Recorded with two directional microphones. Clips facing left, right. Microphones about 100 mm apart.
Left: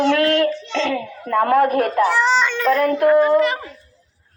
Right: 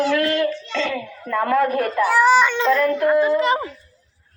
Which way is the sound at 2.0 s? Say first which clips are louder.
Right 2 dB; 10° right (ahead or behind).